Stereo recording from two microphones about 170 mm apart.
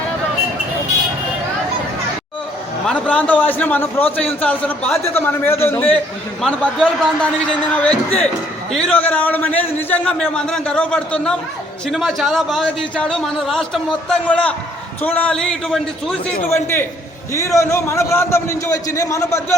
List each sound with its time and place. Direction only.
2.8 s a man's voice: 5° left (ahead or behind)
16.5 s a man's voice: 15° left (ahead or behind)